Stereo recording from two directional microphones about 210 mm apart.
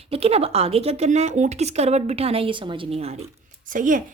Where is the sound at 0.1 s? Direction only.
30° right (ahead or behind).